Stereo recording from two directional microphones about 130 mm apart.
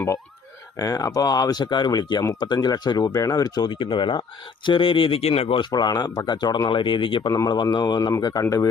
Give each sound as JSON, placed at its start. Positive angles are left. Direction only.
{"t": 0.8, "sound": "speech", "side_deg": 30}
{"t": 5.7, "sound": "speech", "side_deg": 30}
{"t": 7.3, "sound": "speech", "side_deg": 25}